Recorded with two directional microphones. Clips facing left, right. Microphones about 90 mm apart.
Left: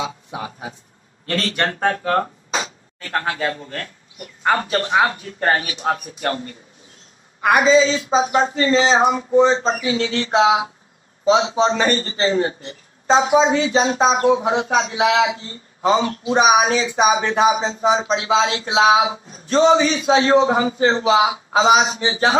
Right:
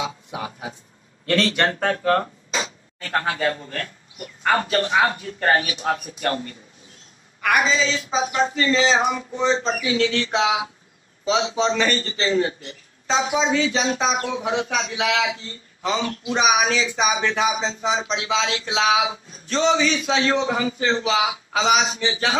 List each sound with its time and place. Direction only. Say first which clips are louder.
1.2 s a man's voice: right 2 dB; 35° left (ahead or behind)
4.4 s a man's voice: left 1 dB; 30° left (ahead or behind)
7.4 s a man's voice: left 6 dB; 30° left (ahead or behind)